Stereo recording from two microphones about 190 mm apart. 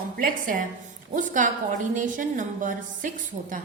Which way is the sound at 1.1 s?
45° right (ahead or behind).